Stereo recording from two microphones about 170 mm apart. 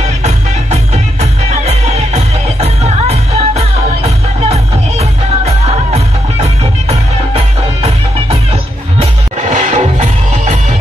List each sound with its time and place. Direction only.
1.5 s music: 40° right (ahead or behind)